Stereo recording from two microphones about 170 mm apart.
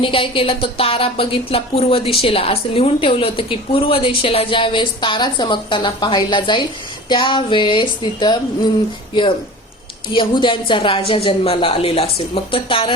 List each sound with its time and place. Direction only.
0.0 s speech: 30° left (ahead or behind)
10.2 s speech: 30° left (ahead or behind)